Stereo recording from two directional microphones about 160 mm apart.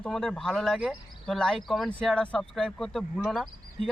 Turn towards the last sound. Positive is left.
turn(degrees=0)  # may be behind; listen again after turning